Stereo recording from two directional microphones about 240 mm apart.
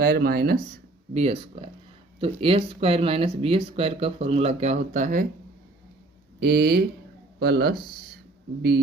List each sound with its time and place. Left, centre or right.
0.0 s speech: right
2.2 s speech: right
6.4 s speech: right